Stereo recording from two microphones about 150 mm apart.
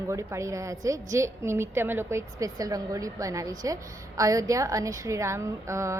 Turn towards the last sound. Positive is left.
turn(degrees=-20)  # may be behind; listen again after turning